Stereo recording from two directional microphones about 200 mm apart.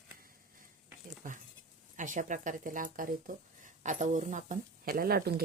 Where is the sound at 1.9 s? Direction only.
40° right (ahead or behind).